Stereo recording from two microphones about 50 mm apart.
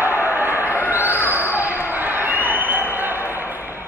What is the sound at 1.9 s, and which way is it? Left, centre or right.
Basketball bounce, right.